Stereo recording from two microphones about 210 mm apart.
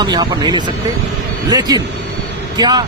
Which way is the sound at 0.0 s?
20° right (ahead or behind).